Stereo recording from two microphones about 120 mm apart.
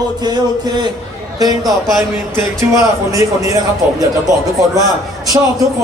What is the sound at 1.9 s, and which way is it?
A man's voice, 15° right (ahead or behind).